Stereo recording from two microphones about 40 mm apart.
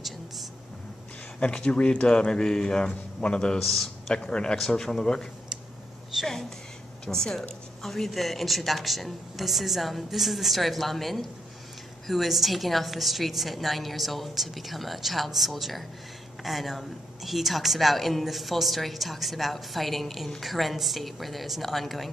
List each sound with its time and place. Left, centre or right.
1.4 s speech: left
3.5 s a woman's voice: centre
4.1 s speech: left
4.6 s speech: centre
7.1 s a woman's voice: centre